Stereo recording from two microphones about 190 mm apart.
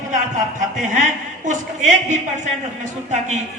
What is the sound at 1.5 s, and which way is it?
A woman's voice, 40° right (ahead or behind).